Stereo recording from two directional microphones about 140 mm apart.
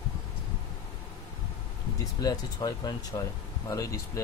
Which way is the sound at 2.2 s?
30° left (ahead or behind).